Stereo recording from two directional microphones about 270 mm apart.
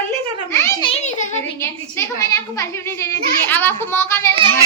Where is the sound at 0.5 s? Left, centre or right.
Centre.